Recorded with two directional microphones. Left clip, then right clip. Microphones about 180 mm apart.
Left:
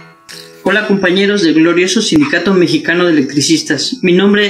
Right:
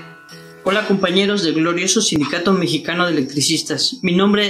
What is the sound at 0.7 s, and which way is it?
Speech, 20° right (ahead or behind).